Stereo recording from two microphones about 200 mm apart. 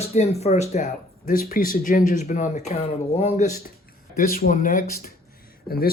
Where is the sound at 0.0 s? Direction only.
30° left (ahead or behind).